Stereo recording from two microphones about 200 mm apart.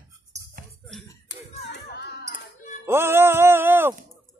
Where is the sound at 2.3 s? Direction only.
40° left (ahead or behind).